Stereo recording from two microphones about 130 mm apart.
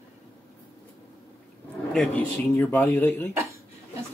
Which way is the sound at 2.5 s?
15° left (ahead or behind).